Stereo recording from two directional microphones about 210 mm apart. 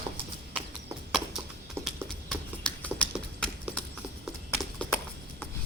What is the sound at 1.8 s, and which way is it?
Clip-clop, centre (ahead or behind).